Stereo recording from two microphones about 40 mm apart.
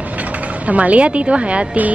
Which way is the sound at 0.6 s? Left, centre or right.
Right.